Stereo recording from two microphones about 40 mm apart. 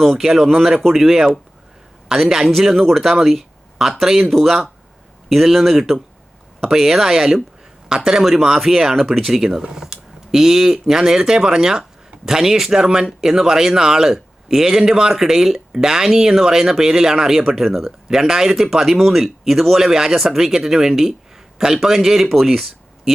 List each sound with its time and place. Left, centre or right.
0.0 s speech: centre
8.2 s speech: centre
17.7 s speech: centre
18.2 s speech: centre